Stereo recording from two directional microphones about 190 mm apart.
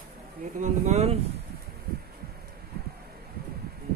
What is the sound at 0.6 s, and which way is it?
Speech, 35° right (ahead or behind).